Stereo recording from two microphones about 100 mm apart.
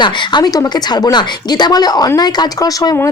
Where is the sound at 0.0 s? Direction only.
45° left (ahead or behind).